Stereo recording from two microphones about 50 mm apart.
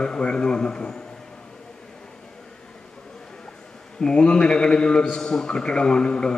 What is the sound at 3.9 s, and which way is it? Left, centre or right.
A man's voice, centre.